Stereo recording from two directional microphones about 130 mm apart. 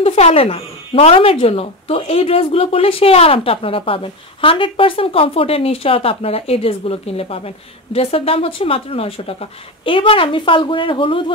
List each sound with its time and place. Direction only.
0.0 s speech: 50° left (ahead or behind)